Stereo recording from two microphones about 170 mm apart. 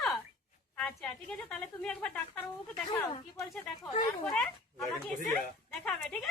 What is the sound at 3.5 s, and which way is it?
Speech, centre (ahead or behind).